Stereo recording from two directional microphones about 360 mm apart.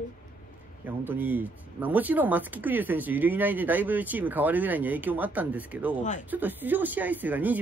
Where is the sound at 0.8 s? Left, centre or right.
Centre.